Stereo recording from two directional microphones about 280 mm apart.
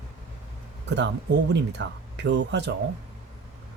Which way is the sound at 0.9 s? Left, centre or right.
Right.